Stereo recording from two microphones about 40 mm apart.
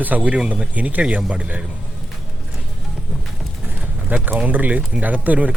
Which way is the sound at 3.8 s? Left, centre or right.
Right.